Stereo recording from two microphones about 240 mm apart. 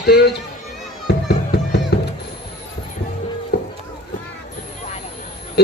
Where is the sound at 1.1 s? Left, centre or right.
Left.